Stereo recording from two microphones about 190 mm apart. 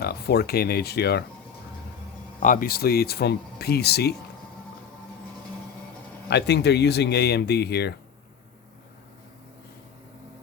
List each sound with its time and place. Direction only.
0.0 s speech: 55° left (ahead or behind)
2.4 s speech: 45° left (ahead or behind)
6.3 s speech: 60° left (ahead or behind)